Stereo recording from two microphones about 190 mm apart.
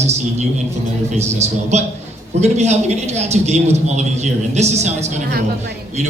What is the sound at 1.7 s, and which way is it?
A man's voice, 35° right (ahead or behind).